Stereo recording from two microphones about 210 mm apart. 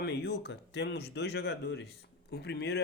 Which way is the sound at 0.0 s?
50° left (ahead or behind).